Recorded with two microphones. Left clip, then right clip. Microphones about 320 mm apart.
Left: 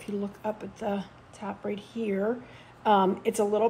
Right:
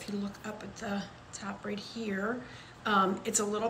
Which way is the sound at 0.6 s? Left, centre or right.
Centre.